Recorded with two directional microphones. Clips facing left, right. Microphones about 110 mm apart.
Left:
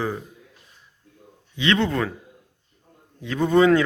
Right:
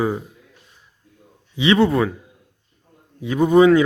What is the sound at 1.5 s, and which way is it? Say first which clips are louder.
Speech: right 6 dB; 15° right (ahead or behind).